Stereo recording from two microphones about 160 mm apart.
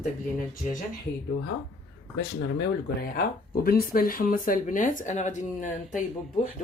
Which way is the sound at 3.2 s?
65° left (ahead or behind).